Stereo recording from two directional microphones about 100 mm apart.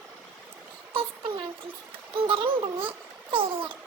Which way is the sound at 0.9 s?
65° right (ahead or behind).